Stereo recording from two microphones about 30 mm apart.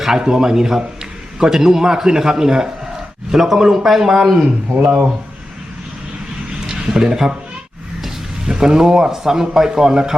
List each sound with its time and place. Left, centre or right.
0.0 s speech: centre
4.4 s a man's voice: right
6.7 s speech: right
8.4 s speech: right